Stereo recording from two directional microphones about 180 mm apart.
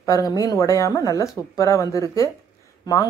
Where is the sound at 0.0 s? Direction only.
20° left (ahead or behind).